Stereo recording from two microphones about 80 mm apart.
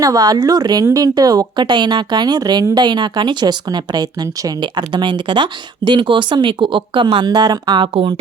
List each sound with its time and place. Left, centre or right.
0.0 s a woman's voice: right
1.5 s a woman's voice: right
2.7 s speech: right